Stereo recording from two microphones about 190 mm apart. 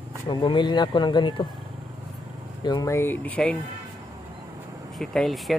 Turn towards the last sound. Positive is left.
turn(degrees=0)  # may be behind; listen again after turning